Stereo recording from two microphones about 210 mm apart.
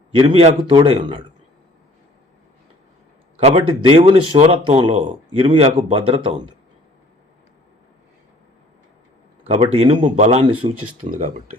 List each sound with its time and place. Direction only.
0.1 s speech: 25° right (ahead or behind)
3.4 s speech: 25° right (ahead or behind)
9.5 s speech: 25° right (ahead or behind)
11.0 s speech: 40° right (ahead or behind)